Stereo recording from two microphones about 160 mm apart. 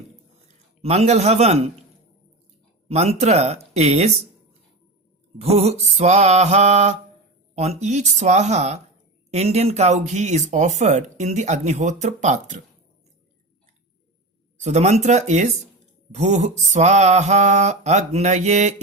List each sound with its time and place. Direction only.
0.8 s speech: 40° right (ahead or behind)
2.9 s speech: 40° right (ahead or behind)
5.4 s speech: 40° right (ahead or behind)
14.6 s speech: 45° right (ahead or behind)